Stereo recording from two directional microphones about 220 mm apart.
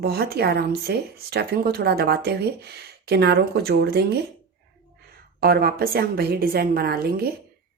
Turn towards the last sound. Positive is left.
turn(degrees=-45)  # may be behind; listen again after turning